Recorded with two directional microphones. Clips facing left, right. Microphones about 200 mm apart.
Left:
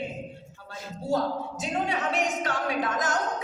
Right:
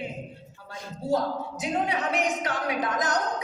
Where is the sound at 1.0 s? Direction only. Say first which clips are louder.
Right 1 dB; 20° right (ahead or behind).